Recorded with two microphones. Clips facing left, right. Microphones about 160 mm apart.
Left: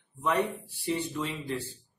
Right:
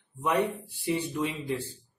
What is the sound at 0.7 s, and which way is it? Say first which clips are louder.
Speech: right 2 dB; 15° right (ahead or behind).